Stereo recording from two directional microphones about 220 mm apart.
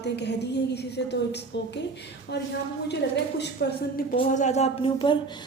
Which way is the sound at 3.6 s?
50° left (ahead or behind).